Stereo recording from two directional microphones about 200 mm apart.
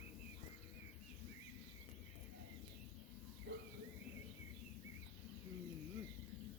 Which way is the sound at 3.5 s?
65° right (ahead or behind).